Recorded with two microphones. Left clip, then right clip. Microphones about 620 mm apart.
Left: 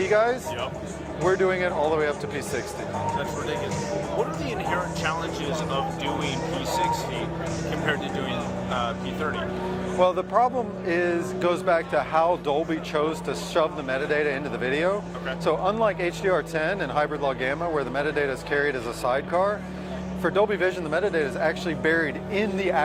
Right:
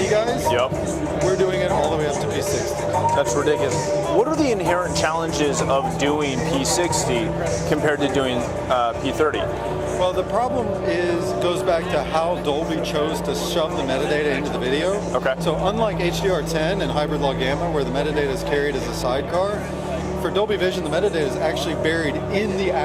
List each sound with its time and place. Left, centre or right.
0.1 s music: left
1.5 s music: left
10.0 s speech: left
14.1 s speech: left